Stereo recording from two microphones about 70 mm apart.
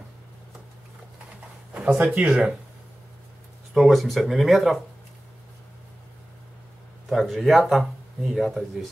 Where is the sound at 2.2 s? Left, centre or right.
Centre.